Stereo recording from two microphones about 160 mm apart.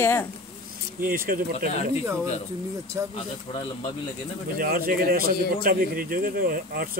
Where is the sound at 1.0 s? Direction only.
60° right (ahead or behind).